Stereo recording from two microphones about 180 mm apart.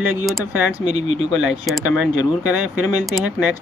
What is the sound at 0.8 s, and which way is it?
Speech, 40° right (ahead or behind).